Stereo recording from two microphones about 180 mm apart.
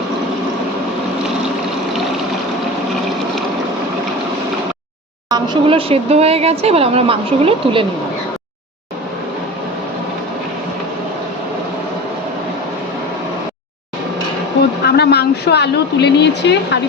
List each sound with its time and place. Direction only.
5.3 s speech: 30° right (ahead or behind)
14.8 s a woman's voice: 65° left (ahead or behind)